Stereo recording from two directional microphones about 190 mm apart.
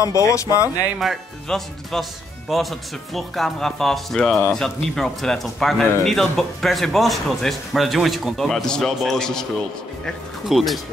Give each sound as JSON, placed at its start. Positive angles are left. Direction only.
{"t": 0.0, "sound": "speech", "side_deg": 15}
{"t": 0.9, "sound": "speech", "side_deg": 0}